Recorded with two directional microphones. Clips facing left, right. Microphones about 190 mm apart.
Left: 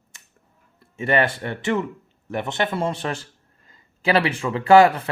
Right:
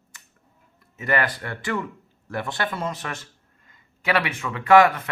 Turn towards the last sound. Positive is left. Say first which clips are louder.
# left 2 dB
turn(degrees=30)  # may be behind; listen again after turning